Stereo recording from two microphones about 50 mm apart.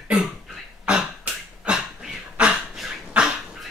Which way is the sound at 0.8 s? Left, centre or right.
Right.